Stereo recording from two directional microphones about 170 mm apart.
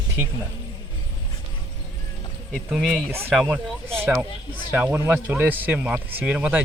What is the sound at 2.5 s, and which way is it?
Speech, centre (ahead or behind).